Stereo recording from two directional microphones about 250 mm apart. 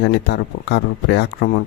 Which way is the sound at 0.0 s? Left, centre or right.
Left.